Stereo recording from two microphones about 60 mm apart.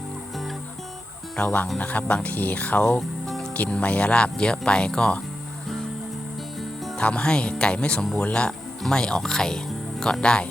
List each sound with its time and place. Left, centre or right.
1.4 s speech: centre
3.2 s music: centre
3.5 s speech: left
6.9 s speech: centre